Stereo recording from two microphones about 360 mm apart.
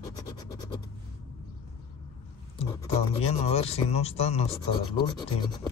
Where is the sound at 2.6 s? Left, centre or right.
Centre.